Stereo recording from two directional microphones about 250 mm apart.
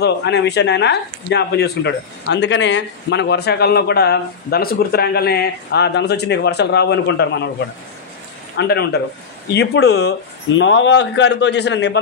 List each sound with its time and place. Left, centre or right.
0.0 s speech: left
8.5 s speech: left